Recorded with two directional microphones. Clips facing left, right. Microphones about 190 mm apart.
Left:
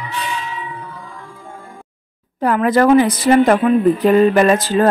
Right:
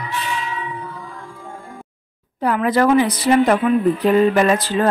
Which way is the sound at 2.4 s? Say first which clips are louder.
Left 3 dB; 50° left (ahead or behind).